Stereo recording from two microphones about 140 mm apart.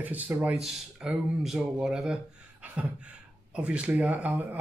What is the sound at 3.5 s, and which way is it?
Speech, 10° right (ahead or behind).